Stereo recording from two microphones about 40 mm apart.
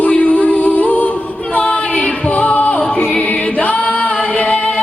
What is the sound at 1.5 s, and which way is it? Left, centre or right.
Singing, left.